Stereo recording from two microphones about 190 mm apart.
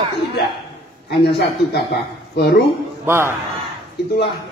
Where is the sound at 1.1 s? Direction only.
60° left (ahead or behind).